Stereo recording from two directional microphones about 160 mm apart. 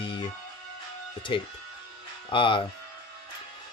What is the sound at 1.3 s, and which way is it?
Speech, 30° left (ahead or behind).